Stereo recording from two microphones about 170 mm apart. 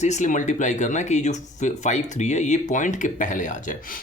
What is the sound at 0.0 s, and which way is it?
Speech, 45° left (ahead or behind).